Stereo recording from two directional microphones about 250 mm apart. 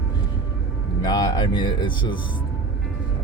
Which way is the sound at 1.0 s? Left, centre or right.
Centre.